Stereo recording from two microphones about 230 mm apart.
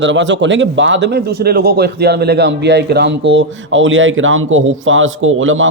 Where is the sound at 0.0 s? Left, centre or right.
Right.